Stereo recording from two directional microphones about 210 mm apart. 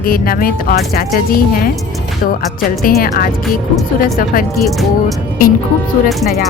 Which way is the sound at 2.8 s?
45° left (ahead or behind).